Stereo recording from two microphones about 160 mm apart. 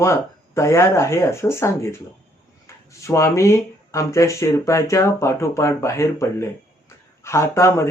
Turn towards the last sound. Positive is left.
turn(degrees=15)  # may be behind; listen again after turning